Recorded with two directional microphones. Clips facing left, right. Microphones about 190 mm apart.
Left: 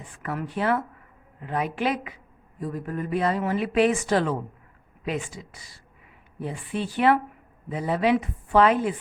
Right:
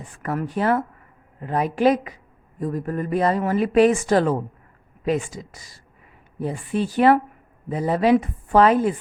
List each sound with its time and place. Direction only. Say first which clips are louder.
0.2 s a woman's voice: right 4 dB; 45° right (ahead or behind)